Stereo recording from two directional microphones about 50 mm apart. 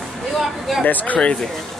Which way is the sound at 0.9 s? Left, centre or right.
Left.